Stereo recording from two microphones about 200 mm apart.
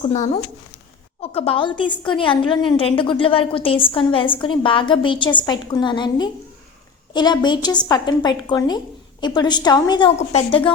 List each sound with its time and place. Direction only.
0.0 s a woman's voice: 40° left (ahead or behind)